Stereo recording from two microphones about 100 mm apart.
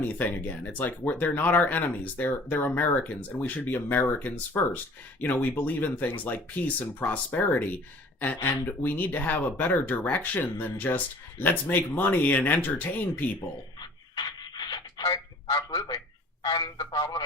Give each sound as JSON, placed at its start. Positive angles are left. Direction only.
{"t": 0.0, "sound": "speech", "side_deg": 15}
{"t": 14.2, "sound": "a sound", "side_deg": 45}
{"t": 16.4, "sound": "a man's voice", "side_deg": 45}